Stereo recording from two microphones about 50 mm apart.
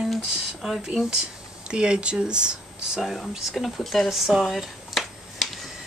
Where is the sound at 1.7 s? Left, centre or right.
Centre.